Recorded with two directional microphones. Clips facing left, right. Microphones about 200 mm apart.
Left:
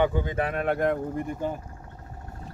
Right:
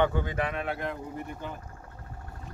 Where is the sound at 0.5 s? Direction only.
50° left (ahead or behind).